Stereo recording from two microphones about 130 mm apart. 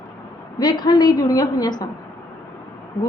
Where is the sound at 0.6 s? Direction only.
35° left (ahead or behind).